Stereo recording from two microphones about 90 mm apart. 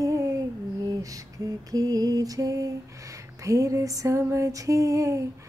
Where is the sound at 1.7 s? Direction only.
45° right (ahead or behind).